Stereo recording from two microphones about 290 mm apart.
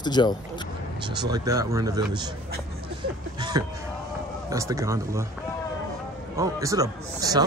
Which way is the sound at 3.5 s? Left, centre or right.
Centre.